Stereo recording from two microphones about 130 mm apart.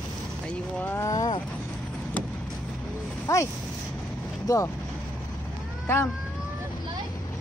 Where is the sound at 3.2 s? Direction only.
25° left (ahead or behind).